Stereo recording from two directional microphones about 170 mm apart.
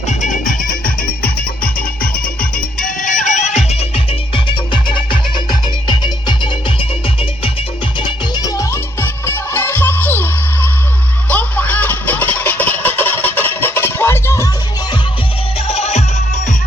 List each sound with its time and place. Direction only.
0.1 s music: 45° left (ahead or behind)
2.8 s music: 50° left (ahead or behind); by 10.7 s 10° left (ahead or behind)
11.3 s a sound: 10° left (ahead or behind)
15.5 s music: 35° left (ahead or behind)